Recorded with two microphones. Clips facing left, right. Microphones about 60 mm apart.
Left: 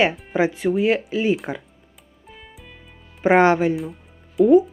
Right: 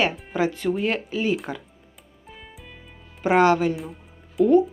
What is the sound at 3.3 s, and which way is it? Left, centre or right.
Speech, left.